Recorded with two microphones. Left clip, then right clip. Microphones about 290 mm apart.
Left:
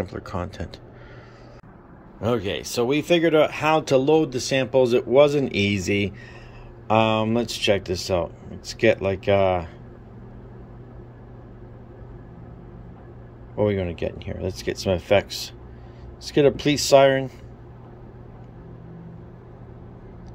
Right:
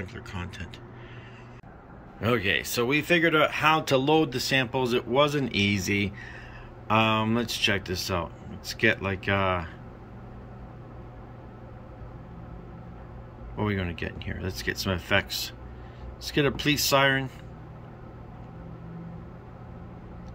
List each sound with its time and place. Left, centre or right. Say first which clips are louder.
0.0 s speech: left 9 dB; centre
2.1 s speech: even; centre
13.6 s speech: left 8 dB; centre